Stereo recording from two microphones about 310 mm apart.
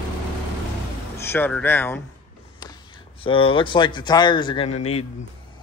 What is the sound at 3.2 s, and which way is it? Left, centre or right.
A man's voice, centre.